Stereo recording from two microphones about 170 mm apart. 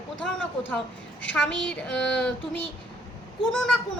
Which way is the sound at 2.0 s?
90° left.